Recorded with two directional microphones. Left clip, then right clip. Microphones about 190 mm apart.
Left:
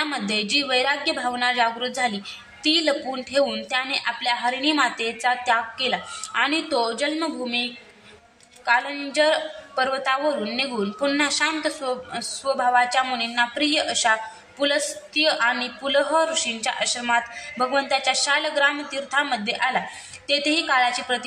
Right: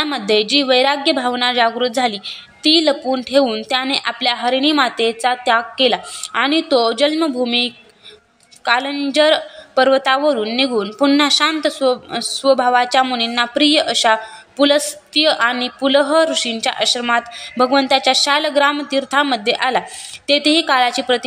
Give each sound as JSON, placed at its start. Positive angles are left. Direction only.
{"t": 0.0, "sound": "a woman's voice", "side_deg": -40}